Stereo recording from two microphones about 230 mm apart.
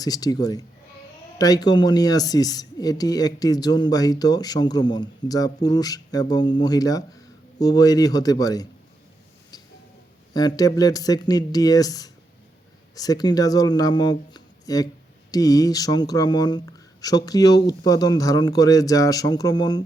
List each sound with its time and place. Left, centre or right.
0.0 s speech: centre
10.3 s speech: centre